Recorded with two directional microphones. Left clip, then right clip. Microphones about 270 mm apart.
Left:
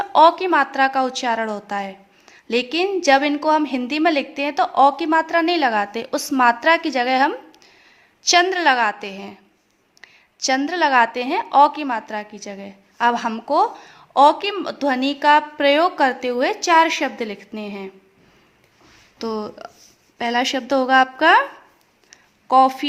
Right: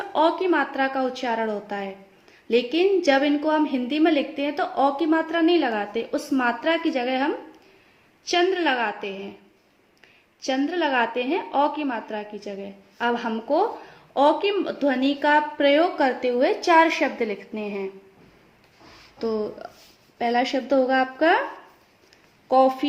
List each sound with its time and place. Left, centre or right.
0.0 s a woman's voice: left
19.2 s a woman's voice: left
22.4 s a woman's voice: left